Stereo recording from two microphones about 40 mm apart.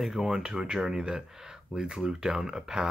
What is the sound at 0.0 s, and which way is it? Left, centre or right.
Speech, centre.